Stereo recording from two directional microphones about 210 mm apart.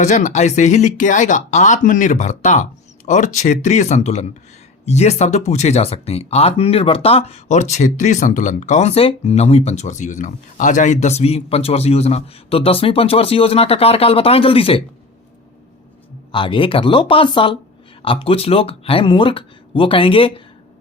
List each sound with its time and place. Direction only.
0.0 s speech: 35° left (ahead or behind)
16.3 s speech: 25° left (ahead or behind)